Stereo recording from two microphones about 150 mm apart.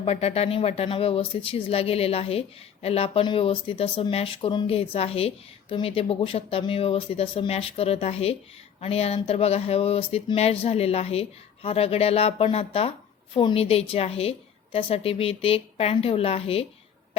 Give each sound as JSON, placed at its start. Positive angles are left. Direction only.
{"t": 0.0, "sound": "speech", "side_deg": 45}